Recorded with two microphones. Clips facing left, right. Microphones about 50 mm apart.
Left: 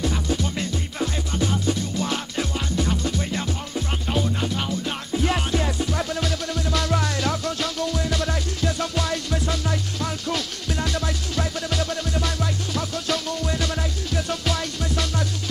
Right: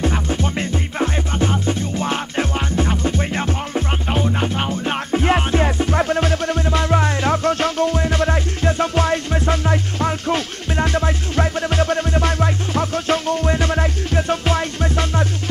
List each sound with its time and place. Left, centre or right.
0.0 s music: right